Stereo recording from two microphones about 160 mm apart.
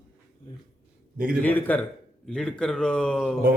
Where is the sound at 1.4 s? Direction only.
10° left (ahead or behind).